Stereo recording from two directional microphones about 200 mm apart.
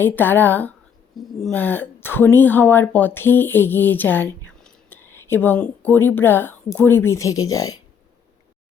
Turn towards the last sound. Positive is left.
turn(degrees=15)  # may be behind; listen again after turning